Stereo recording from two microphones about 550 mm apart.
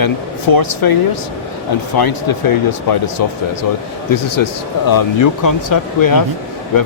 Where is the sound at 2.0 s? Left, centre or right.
Left.